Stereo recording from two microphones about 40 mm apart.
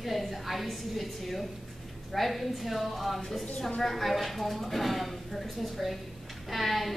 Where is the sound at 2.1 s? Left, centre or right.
Centre.